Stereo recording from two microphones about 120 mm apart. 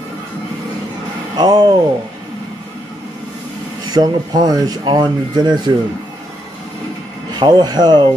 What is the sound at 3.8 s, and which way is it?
Speech, 35° right (ahead or behind).